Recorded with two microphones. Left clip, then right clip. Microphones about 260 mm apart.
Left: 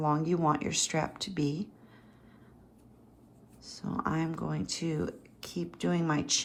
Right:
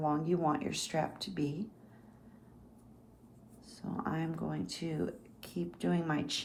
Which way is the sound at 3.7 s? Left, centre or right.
Left.